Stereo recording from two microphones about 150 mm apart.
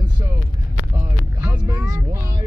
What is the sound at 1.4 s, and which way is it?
Vehicle, 20° right (ahead or behind).